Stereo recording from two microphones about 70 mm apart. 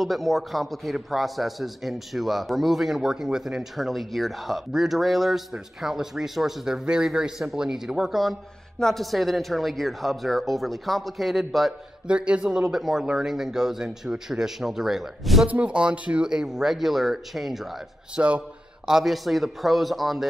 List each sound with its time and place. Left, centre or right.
0.0 s a man's voice: centre
12.1 s a man's voice: centre
15.4 s speech: centre
18.1 s a man's voice: centre
18.9 s a man's voice: centre